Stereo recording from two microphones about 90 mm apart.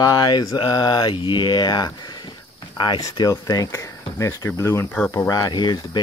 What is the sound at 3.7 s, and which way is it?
Speech, 35° left (ahead or behind).